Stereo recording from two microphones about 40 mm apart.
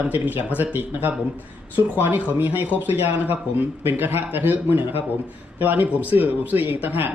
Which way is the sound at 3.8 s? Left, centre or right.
Right.